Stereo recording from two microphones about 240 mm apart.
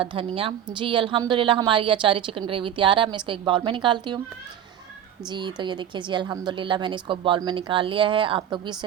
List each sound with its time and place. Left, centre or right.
0.0 s a woman's voice: right
5.3 s a woman's voice: centre